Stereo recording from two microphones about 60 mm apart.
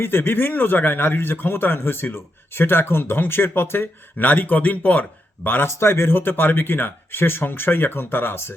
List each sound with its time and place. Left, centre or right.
0.0 s a man's voice: left
5.6 s a man's voice: left